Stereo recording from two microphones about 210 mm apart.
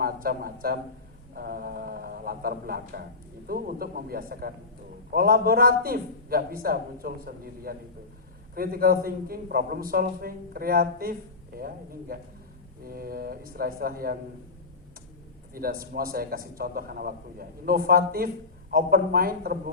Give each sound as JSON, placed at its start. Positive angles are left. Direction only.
{"t": 0.0, "sound": "a man's voice", "side_deg": -45}
{"t": 15.5, "sound": "a man's voice", "side_deg": -45}